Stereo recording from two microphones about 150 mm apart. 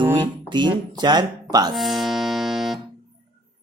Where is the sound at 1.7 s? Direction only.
Centre (ahead or behind).